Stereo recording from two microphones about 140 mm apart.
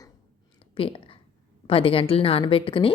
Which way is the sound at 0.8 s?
40° left (ahead or behind).